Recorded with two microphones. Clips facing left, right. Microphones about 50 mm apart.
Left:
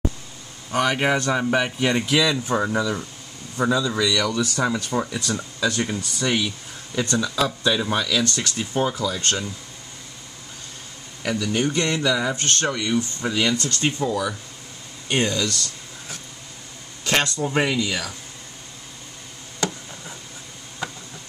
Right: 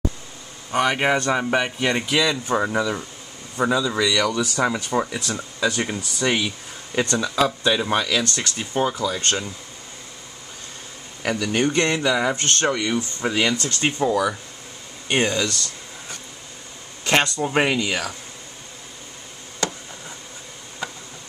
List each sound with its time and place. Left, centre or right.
0.7 s speech: centre; by 7.1 s right
7.4 s speech: centre
11.5 s speech: right
11.9 s speech: centre
17.0 s speech: centre
17.7 s speech: right
19.6 s a sound: centre
20.8 s a sound: centre